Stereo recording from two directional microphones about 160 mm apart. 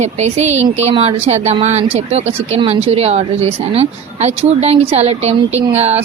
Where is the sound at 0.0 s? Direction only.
45° right (ahead or behind).